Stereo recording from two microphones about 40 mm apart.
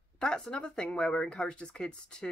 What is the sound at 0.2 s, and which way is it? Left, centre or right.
Speech, left.